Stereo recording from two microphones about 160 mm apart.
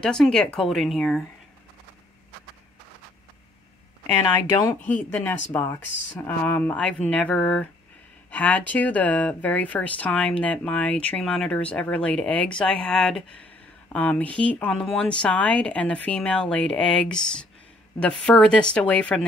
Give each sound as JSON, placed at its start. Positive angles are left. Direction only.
{"t": 0.0, "sound": "speech", "side_deg": 5}
{"t": 4.5, "sound": "speech", "side_deg": 20}